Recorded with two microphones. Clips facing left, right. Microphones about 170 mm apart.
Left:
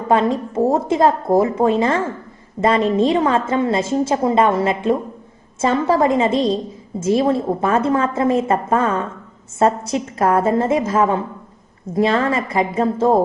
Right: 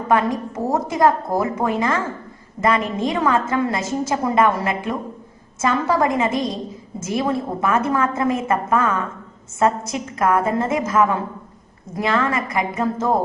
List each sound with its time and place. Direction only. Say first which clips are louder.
0.1 s a woman's voice: left 3 dB; 25° left (ahead or behind)